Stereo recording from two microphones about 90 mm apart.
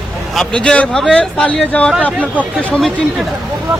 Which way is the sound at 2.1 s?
15° right (ahead or behind).